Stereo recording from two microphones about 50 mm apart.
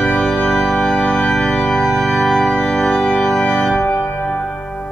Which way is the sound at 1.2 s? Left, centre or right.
Centre.